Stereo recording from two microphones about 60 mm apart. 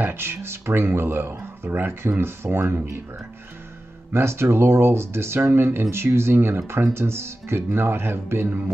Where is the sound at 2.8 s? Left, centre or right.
Right.